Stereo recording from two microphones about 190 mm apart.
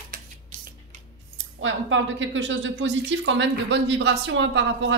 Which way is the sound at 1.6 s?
85° right.